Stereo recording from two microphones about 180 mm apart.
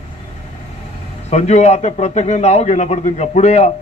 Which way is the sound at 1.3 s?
40° left (ahead or behind).